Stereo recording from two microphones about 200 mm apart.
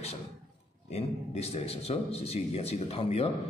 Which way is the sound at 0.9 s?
30° left (ahead or behind).